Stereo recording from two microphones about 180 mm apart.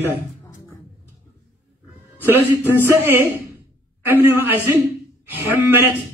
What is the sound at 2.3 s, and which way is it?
A man's voice, 10° right (ahead or behind).